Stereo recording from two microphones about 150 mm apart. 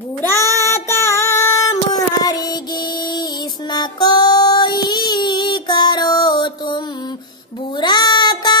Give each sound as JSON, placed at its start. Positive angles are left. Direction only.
{"t": 0.3, "sound": "female singing", "side_deg": 20}
{"t": 2.2, "sound": "music", "side_deg": 25}
{"t": 3.7, "sound": "child singing", "side_deg": 30}
{"t": 7.7, "sound": "music", "side_deg": 30}